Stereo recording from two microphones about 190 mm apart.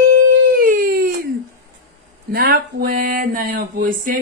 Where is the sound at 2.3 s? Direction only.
55° right (ahead or behind).